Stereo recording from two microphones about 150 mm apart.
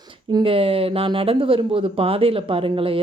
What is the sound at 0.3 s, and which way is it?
Speech, 30° right (ahead or behind).